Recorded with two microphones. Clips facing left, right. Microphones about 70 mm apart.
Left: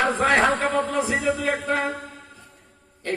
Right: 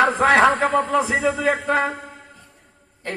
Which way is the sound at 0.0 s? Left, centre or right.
Right.